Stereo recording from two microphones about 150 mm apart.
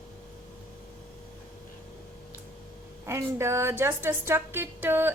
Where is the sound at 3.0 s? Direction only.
20° right (ahead or behind).